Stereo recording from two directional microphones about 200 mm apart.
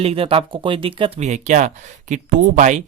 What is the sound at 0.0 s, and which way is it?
Speech, 30° right (ahead or behind).